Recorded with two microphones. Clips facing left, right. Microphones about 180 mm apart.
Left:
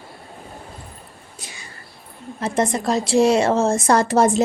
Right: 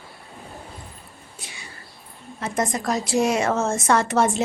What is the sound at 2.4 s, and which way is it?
A woman's voice, 30° left (ahead or behind).